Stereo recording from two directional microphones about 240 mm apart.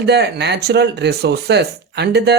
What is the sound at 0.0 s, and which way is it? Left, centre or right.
Speech, right.